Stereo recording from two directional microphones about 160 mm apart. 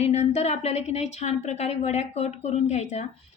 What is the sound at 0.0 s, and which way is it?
A woman's voice, 45° left (ahead or behind).